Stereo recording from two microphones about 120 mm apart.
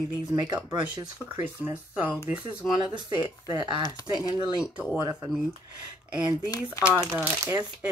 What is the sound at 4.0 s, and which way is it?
Speech, 35° left (ahead or behind).